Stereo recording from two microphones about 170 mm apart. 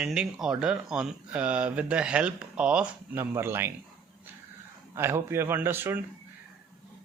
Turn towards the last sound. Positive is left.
turn(degrees=-10)  # may be behind; listen again after turning